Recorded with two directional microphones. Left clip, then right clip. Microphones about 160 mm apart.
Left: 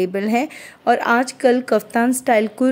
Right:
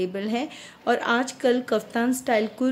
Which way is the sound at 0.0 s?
45° left (ahead or behind).